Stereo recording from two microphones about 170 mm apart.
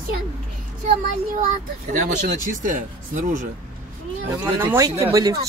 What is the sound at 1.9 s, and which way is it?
Speech, 50° right (ahead or behind).